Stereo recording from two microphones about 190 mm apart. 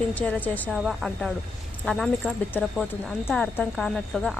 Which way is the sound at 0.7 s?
Centre (ahead or behind).